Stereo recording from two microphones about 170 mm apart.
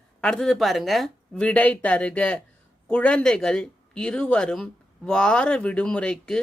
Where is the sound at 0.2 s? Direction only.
5° left (ahead or behind).